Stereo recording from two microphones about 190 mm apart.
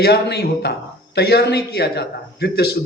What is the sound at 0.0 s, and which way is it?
A man's voice, 60° left (ahead or behind).